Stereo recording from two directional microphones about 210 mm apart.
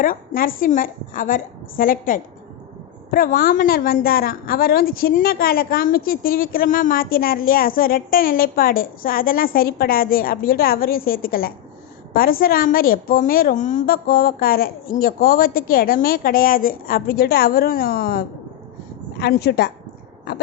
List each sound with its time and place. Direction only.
0.0 s a woman's voice: 40° left (ahead or behind)